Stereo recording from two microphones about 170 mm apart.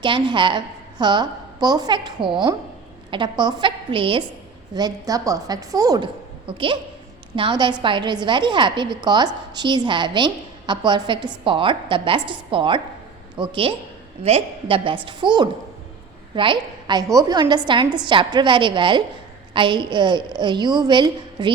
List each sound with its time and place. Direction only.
0.0 s a woman's voice: 30° right (ahead or behind)